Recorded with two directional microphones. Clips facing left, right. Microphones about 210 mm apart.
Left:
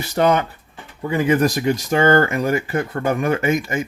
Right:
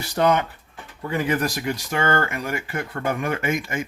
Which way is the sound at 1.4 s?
45° left (ahead or behind).